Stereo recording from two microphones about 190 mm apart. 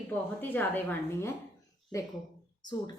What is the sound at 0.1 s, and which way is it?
A woman's voice, 10° left (ahead or behind).